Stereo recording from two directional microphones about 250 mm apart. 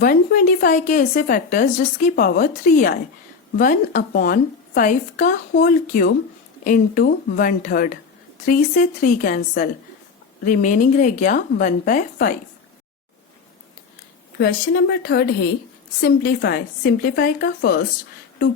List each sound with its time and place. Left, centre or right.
0.0 s speech: left
14.3 s speech: left